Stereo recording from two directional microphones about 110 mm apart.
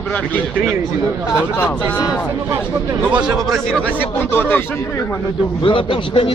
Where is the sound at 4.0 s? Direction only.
15° left (ahead or behind).